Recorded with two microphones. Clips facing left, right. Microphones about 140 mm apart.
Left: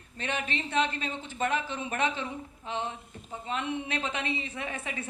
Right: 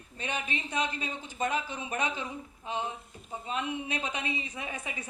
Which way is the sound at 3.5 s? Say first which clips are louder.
Left 1 dB; 15° right (ahead or behind).